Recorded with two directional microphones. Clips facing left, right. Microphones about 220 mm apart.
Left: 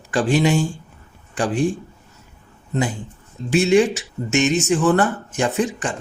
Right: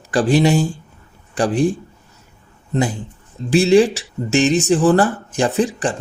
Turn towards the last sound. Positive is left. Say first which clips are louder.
# right 3 dB
turn(degrees=-35)  # may be behind; listen again after turning